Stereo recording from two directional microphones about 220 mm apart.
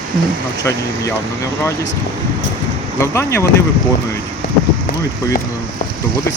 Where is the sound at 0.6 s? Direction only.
15° left (ahead or behind).